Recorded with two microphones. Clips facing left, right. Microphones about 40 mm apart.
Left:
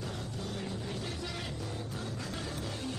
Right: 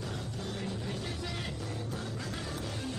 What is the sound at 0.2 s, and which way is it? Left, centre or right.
Vehicle, right.